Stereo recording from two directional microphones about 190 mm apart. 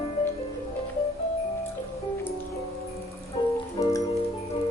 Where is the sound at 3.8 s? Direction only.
25° left (ahead or behind).